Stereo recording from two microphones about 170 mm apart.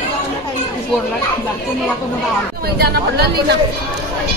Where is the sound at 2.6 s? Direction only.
70° right (ahead or behind).